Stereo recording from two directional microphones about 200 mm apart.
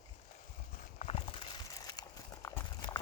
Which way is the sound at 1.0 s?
30° left (ahead or behind).